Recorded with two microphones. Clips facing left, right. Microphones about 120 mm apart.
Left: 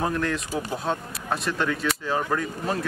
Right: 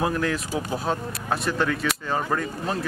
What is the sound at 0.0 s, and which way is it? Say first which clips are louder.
Speech: right 1 dB; centre (ahead or behind).